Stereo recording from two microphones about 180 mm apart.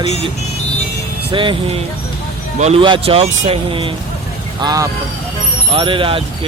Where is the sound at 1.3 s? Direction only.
30° right (ahead or behind).